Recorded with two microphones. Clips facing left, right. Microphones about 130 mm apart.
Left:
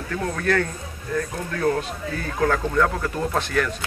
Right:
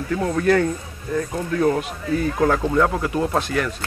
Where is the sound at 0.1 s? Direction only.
15° right (ahead or behind).